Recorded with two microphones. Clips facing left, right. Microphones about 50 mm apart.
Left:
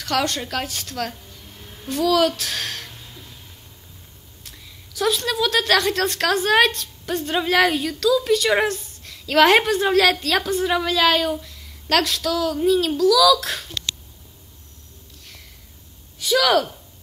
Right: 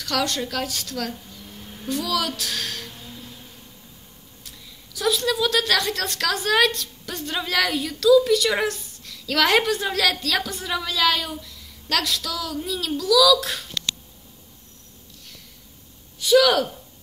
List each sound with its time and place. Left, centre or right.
0.0 s a woman's voice: left
4.4 s a woman's voice: left
16.3 s a woman's voice: left